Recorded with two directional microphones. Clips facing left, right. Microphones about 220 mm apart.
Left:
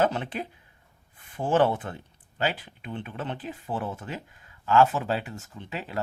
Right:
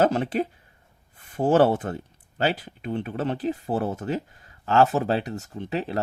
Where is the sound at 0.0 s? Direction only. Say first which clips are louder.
Right 5 dB; 40° right (ahead or behind).